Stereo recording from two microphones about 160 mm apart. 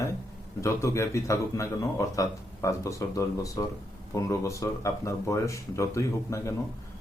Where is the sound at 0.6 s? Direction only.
15° left (ahead or behind).